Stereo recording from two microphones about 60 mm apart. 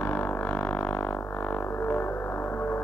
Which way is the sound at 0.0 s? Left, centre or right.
Left.